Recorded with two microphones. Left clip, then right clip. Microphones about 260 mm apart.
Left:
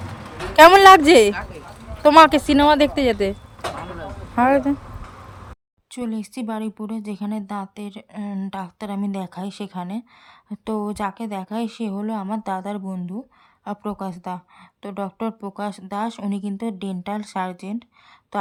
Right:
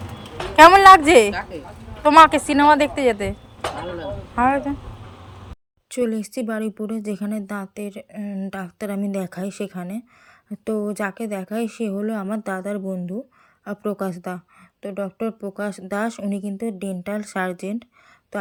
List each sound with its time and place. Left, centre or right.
0.5 s speech: left
4.4 s speech: left
5.9 s speech: centre